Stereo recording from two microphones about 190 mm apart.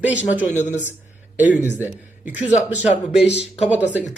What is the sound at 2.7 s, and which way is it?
Speech, 5° right (ahead or behind).